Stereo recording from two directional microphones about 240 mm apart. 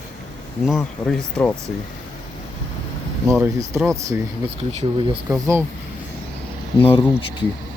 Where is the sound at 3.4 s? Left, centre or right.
Centre.